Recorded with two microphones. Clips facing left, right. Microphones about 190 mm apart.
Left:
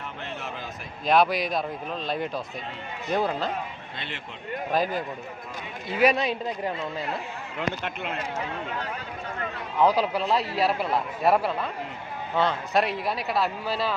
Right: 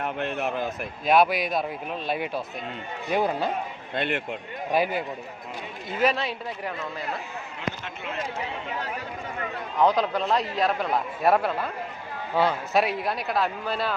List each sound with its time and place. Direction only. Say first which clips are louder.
0.0 s speech: right 8 dB; 60° right (ahead or behind)
1.0 s speech: right 1 dB; 5° right (ahead or behind)
3.9 s speech: right 15 dB; 55° right (ahead or behind)
4.7 s speech: right 2 dB; 10° right (ahead or behind)
6.0 s speech: left 3 dB; 15° left (ahead or behind)
7.9 s speech: left 3 dB; 55° left (ahead or behind)
9.7 s speech: even; 10° left (ahead or behind)